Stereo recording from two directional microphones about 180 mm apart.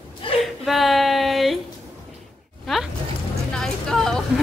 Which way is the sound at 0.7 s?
Centre (ahead or behind).